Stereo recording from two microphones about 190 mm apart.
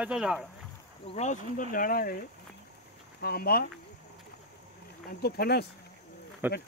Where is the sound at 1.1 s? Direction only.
40° left (ahead or behind).